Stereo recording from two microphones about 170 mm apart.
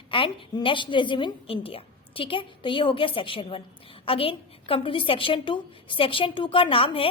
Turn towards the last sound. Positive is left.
turn(degrees=30)  # may be behind; listen again after turning